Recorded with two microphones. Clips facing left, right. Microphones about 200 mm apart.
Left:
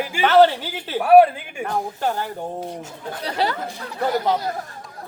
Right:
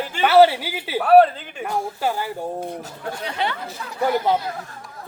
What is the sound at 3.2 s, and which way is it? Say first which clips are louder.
Speech: left 3 dB; 35° left (ahead or behind).